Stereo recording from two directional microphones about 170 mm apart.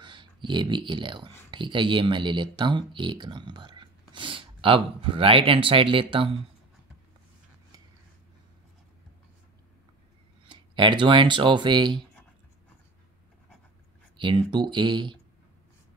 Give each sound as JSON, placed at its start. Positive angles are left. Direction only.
{"t": 0.0, "sound": "speech", "side_deg": -25}
{"t": 10.5, "sound": "speech", "side_deg": -30}
{"t": 14.1, "sound": "speech", "side_deg": -30}